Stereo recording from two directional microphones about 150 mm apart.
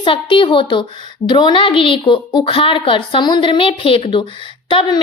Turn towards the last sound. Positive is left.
turn(degrees=30)  # may be behind; listen again after turning